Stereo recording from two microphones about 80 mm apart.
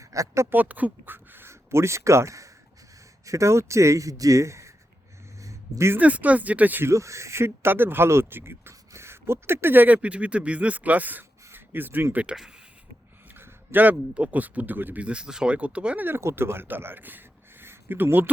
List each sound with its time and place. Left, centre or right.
0.0 s speech: right
0.5 s speech: right
5.4 s a sound: right
6.0 s speech: centre
6.9 s speech: right
12.1 s speech: centre
13.3 s speech: right
16.0 s speech: right